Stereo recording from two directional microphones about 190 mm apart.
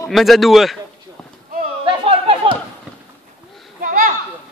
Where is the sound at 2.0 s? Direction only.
30° right (ahead or behind).